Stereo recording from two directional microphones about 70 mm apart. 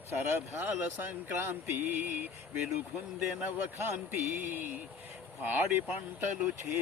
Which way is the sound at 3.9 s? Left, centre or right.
Right.